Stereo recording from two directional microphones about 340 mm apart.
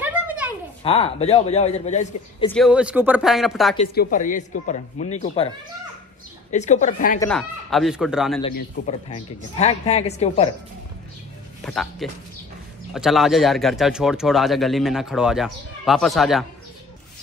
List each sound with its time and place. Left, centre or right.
0.0 s a sound: centre
0.8 s a man's voice: centre
2.5 s speech: centre
3.7 s speech: left
6.5 s speech: left
7.2 s speech: centre
8.5 s speech: left
11.6 s speech: centre